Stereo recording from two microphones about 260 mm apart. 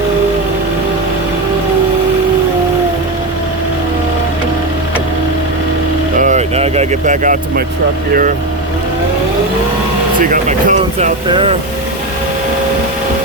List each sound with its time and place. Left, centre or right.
6.1 s vehicle: right
10.2 s speech: right
11.3 s speech: centre